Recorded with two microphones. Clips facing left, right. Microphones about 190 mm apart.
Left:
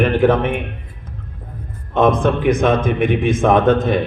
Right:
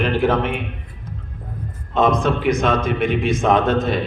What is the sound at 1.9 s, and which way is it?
A man's voice, 55° left (ahead or behind).